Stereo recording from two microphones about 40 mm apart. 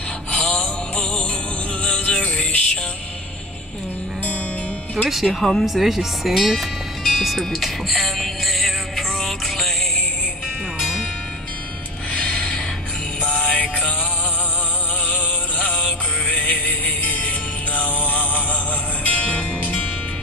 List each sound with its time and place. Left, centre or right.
0.3 s music: left
5.0 s speech: centre
7.3 s music: centre
12.3 s a sound: centre
13.2 s music: left
13.5 s music: left
15.0 s music: left